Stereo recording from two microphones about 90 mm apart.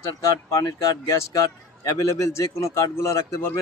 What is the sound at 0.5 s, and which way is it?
A man's voice, 40° left (ahead or behind).